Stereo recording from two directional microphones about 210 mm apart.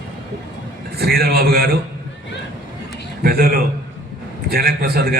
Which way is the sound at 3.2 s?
45° right (ahead or behind).